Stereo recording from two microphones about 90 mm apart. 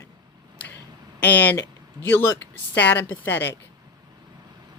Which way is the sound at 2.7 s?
20° left (ahead or behind).